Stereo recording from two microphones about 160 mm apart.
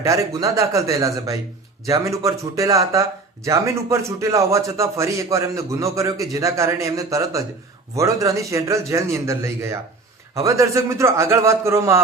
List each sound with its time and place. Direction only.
0.0 s a man's voice: 20° right (ahead or behind)